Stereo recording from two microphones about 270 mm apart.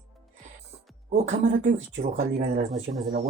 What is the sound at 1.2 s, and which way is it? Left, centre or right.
Speech, right.